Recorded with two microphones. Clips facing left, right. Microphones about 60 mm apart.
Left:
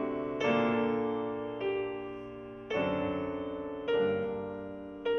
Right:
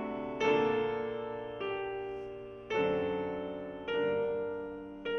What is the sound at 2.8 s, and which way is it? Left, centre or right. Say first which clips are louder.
Music: right 1 dB; left.